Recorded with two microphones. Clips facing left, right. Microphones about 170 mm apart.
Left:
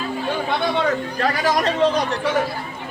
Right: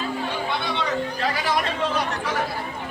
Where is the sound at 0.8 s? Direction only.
45° left (ahead or behind).